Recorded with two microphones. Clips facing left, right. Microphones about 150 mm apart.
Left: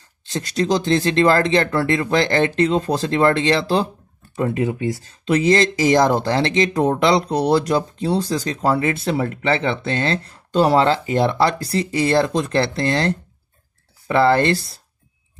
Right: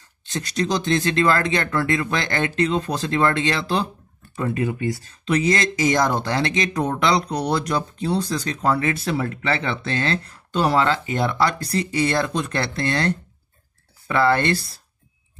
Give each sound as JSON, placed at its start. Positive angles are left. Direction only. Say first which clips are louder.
{"t": 0.6, "sound": "speech", "louder": "left 3 dB", "side_deg": 30}